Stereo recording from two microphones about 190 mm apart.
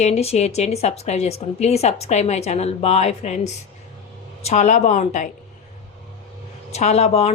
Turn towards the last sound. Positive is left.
turn(degrees=35)  # may be behind; listen again after turning